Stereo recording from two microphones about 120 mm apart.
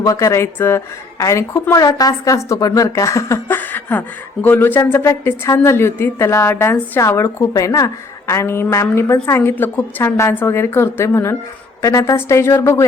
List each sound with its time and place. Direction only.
0.0 s a woman's voice: 30° left (ahead or behind)